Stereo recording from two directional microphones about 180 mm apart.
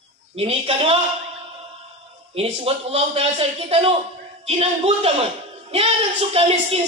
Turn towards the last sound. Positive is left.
turn(degrees=-35)  # may be behind; listen again after turning